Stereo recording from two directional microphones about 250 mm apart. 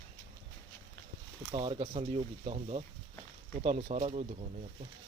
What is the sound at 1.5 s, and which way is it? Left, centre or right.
Speech, right.